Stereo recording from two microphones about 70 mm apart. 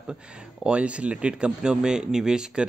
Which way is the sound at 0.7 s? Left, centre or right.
Centre.